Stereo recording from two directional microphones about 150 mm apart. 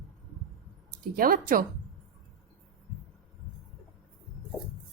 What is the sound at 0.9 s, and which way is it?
Speech, 70° right (ahead or behind).